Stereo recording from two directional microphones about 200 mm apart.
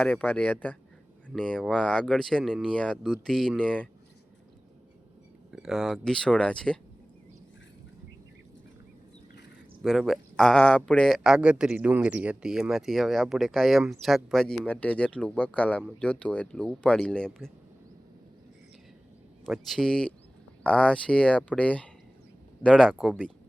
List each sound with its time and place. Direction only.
0.0 s speech: 5° left (ahead or behind)
5.5 s speech: centre (ahead or behind)
9.8 s speech: centre (ahead or behind)
19.5 s speech: centre (ahead or behind)